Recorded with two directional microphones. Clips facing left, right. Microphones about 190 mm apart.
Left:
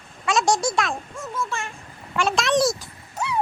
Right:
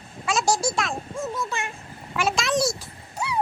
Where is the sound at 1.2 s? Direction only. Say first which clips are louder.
Right 3 dB; 20° right (ahead or behind).